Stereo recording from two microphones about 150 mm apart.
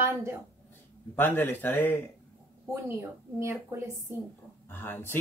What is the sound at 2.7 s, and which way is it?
Speech, 15° right (ahead or behind).